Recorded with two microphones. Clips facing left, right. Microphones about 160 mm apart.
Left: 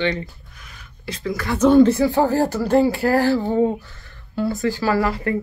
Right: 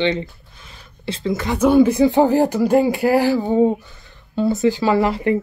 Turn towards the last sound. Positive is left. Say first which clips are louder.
# right 3 dB
turn(degrees=-20)  # may be behind; listen again after turning